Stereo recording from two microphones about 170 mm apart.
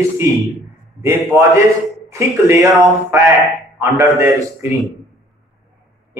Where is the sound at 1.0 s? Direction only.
15° right (ahead or behind).